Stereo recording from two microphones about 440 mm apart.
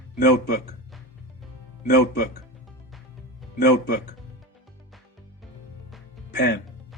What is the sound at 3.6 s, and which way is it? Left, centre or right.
Speech, left.